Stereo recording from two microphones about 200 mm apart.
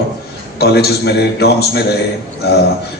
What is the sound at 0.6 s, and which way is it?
A man's voice, 55° left (ahead or behind).